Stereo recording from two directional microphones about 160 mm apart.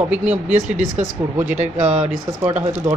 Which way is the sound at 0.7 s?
45° right (ahead or behind).